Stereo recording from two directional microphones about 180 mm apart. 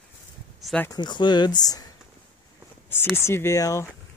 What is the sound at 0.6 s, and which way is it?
Speech, 5° left (ahead or behind).